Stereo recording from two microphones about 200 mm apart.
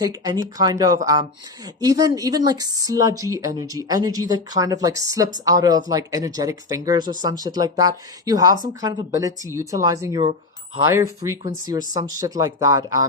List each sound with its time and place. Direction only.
0.0 s a woman's voice: 20° right (ahead or behind)